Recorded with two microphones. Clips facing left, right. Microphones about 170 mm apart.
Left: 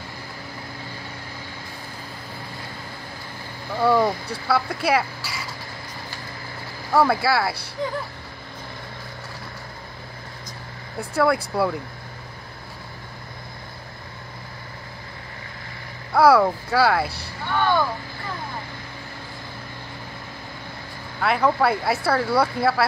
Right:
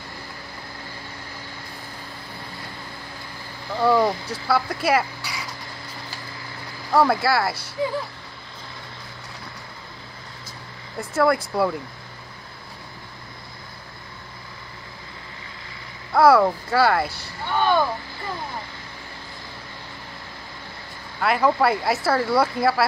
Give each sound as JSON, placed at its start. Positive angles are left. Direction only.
{"t": 3.7, "sound": "speech", "side_deg": 0}
{"t": 6.9, "sound": "speech", "side_deg": 0}
{"t": 11.0, "sound": "speech", "side_deg": 0}
{"t": 16.1, "sound": "speech", "side_deg": 0}
{"t": 17.5, "sound": "speech", "side_deg": -15}
{"t": 21.2, "sound": "speech", "side_deg": 0}